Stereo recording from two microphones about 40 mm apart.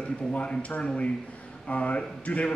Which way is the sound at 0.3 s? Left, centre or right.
Left.